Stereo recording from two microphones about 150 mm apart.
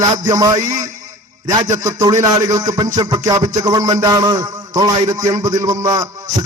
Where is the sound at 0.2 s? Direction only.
20° right (ahead or behind).